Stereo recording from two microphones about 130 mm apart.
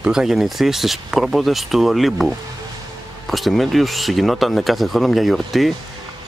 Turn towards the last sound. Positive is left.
turn(degrees=0)  # may be behind; listen again after turning